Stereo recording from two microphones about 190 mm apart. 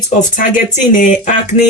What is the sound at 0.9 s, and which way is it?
Speech, 45° left (ahead or behind).